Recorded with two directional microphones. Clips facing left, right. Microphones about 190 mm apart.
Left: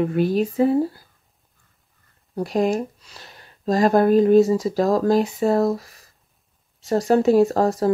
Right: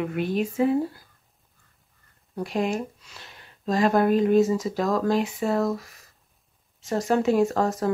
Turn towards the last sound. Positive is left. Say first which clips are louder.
# left 5 dB
turn(degrees=35)  # may be behind; listen again after turning